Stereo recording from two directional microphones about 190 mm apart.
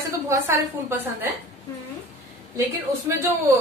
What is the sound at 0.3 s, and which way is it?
A woman's voice, 15° right (ahead or behind).